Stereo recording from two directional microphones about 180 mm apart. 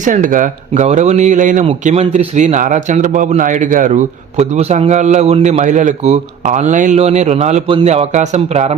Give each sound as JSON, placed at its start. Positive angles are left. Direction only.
{"t": 0.0, "sound": "a man's voice", "side_deg": -45}